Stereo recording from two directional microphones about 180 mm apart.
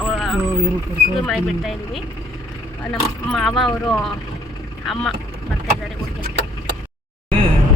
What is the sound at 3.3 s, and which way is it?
A woman's voice, centre (ahead or behind).